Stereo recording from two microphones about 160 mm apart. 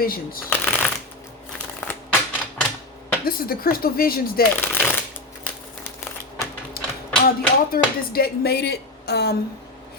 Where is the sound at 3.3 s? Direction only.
70° left (ahead or behind).